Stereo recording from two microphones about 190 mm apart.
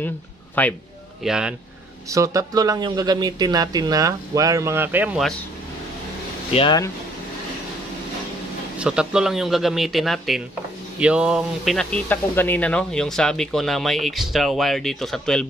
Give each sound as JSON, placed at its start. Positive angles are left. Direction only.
{"t": 0.6, "sound": "a man's voice", "side_deg": 10}
{"t": 1.2, "sound": "speech", "side_deg": -5}
{"t": 2.0, "sound": "speech", "side_deg": -15}
{"t": 6.5, "sound": "speech", "side_deg": 30}
{"t": 8.7, "sound": "speech", "side_deg": -5}